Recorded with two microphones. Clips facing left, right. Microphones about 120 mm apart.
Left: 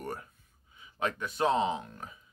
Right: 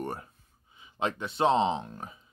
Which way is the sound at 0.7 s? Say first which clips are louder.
Right 2 dB; 25° right (ahead or behind).